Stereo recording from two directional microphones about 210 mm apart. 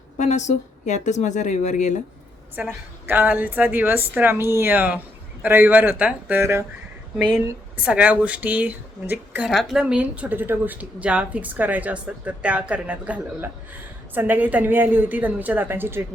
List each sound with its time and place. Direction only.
0.2 s speech: 35° left (ahead or behind)
2.6 s a woman's voice: 10° right (ahead or behind)